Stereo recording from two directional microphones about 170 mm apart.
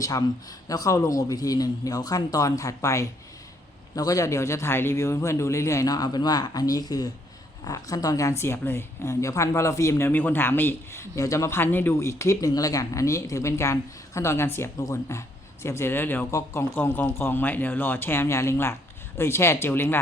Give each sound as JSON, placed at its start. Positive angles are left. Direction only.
{"t": 0.0, "sound": "a man's voice", "side_deg": 20}